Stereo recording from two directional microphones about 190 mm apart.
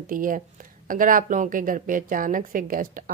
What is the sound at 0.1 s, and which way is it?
A woman's voice, 45° right (ahead or behind).